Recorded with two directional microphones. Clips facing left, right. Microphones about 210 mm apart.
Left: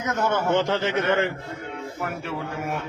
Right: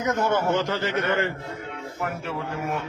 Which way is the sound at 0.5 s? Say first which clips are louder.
Left 2 dB; 20° left (ahead or behind).